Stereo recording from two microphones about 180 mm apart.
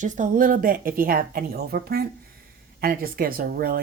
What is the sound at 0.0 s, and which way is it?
Speech, 50° right (ahead or behind).